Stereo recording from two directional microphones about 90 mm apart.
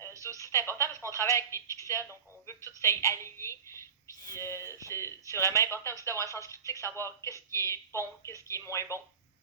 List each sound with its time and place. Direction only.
0.3 s telephone: 35° left (ahead or behind)
1.1 s speech: 35° left (ahead or behind)